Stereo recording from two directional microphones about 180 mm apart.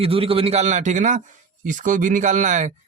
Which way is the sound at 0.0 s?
30° right (ahead or behind).